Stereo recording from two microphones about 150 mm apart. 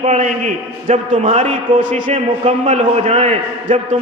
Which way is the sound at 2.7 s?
50° right (ahead or behind).